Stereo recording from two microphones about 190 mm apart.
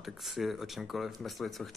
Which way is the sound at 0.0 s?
Centre (ahead or behind).